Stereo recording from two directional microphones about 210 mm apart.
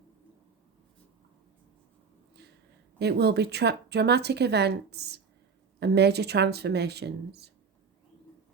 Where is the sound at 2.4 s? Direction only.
50° right (ahead or behind).